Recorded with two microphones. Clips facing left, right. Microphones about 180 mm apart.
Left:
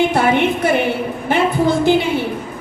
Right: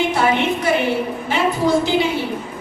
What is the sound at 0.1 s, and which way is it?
Speech, 55° left (ahead or behind).